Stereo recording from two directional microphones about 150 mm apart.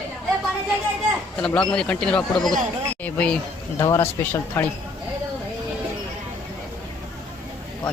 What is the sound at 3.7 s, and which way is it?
Speech, 20° left (ahead or behind).